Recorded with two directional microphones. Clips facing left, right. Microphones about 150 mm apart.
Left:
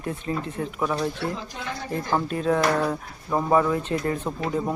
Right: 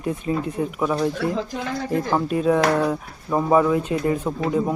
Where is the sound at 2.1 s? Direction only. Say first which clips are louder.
Right 3 dB; 5° right (ahead or behind).